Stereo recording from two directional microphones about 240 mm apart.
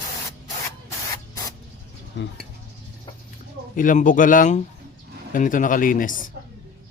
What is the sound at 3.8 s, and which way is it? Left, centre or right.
A man's voice, left.